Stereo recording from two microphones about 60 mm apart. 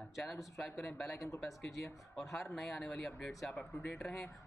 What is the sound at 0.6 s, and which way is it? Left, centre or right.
Speech, centre.